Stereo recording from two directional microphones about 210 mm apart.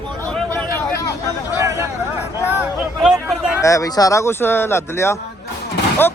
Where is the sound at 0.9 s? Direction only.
15° left (ahead or behind).